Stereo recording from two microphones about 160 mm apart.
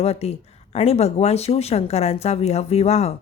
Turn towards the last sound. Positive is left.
turn(degrees=40)  # may be behind; listen again after turning